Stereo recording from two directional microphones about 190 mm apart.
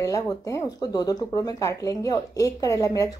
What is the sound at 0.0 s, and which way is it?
Speech, 20° left (ahead or behind).